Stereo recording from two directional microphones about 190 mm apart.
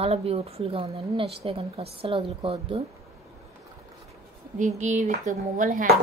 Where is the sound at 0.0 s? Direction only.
30° right (ahead or behind).